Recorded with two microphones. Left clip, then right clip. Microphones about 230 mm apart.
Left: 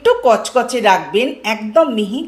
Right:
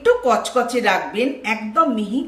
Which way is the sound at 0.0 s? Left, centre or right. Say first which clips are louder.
Left 4 dB; centre.